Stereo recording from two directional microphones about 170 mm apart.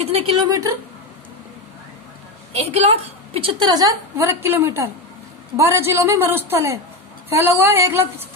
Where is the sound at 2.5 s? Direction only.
35° right (ahead or behind).